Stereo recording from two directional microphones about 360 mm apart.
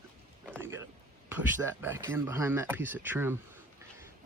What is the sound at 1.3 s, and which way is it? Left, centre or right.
Speech, centre.